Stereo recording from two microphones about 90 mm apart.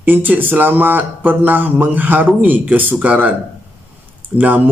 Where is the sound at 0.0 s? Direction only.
20° right (ahead or behind).